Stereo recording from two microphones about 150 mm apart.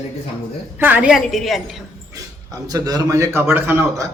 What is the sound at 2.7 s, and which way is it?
A man's voice, 25° right (ahead or behind).